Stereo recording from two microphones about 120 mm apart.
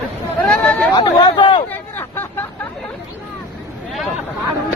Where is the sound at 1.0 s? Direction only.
35° left (ahead or behind).